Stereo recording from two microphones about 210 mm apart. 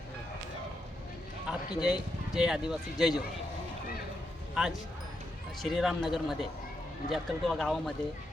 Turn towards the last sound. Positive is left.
turn(degrees=0)  # may be behind; listen again after turning